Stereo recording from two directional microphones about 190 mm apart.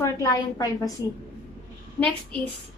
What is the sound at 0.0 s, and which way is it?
Speech, 15° left (ahead or behind).